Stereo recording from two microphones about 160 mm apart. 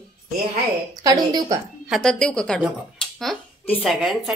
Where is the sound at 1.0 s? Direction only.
25° right (ahead or behind).